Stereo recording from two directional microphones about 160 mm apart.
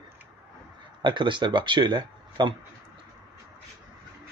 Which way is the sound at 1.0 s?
30° right (ahead or behind).